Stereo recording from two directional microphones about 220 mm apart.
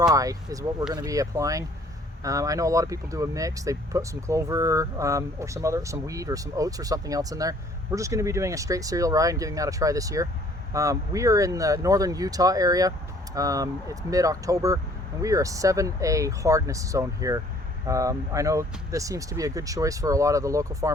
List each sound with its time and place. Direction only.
0.1 s speech: 15° right (ahead or behind)